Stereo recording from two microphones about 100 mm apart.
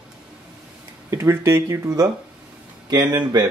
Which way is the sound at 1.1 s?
30° right (ahead or behind).